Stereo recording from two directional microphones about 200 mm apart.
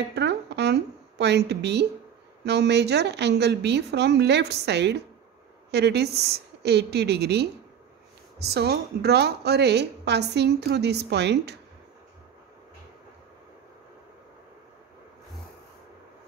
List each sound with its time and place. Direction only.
0.1 s a woman's voice: 55° right (ahead or behind)